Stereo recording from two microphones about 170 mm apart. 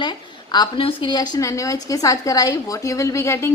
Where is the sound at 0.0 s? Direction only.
25° left (ahead or behind).